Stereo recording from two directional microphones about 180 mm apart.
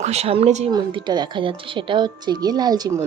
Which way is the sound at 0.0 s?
35° right (ahead or behind).